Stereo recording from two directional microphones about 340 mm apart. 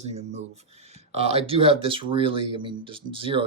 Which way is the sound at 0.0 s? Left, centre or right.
Centre.